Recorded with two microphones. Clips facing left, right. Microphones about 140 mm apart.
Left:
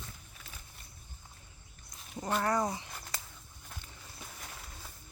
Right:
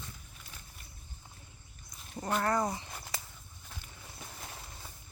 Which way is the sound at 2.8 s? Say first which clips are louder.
Right 2 dB; 10° right (ahead or behind).